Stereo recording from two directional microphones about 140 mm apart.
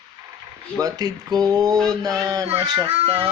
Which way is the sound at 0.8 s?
25° right (ahead or behind).